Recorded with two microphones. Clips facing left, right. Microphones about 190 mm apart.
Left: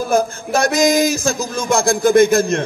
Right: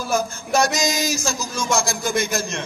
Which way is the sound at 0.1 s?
55° left (ahead or behind).